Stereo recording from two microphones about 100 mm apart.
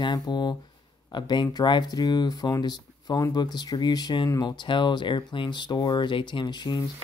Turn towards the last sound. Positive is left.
turn(degrees=45)  # may be behind; listen again after turning